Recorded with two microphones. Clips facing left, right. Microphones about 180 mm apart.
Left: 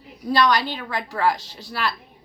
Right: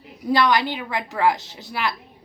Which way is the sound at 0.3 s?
15° right (ahead or behind).